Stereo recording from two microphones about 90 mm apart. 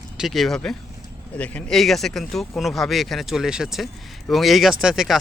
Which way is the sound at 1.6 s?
5° left (ahead or behind).